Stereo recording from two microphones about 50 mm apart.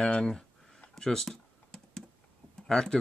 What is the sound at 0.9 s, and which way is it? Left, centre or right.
Computer keyboard, centre.